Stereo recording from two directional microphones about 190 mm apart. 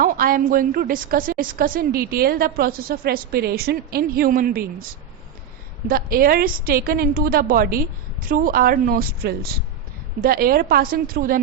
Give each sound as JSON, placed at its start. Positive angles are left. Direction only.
{"t": 0.0, "sound": "a woman's voice", "side_deg": -45}
{"t": 5.9, "sound": "a woman's voice", "side_deg": -50}